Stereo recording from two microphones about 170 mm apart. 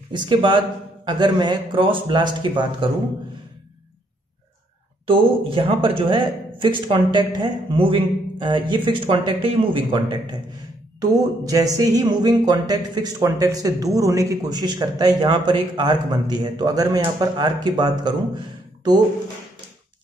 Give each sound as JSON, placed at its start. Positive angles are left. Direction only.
{"t": 0.1, "sound": "speech", "side_deg": -25}
{"t": 5.0, "sound": "speech", "side_deg": -30}